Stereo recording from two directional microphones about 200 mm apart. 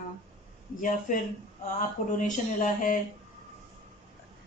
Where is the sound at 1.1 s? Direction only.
40° left (ahead or behind).